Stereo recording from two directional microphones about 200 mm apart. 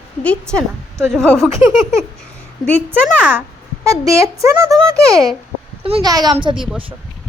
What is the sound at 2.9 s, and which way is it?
A woman's voice, 10° right (ahead or behind).